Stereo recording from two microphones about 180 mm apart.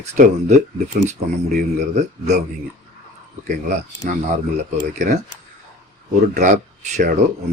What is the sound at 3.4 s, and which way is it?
Speech, 40° right (ahead or behind).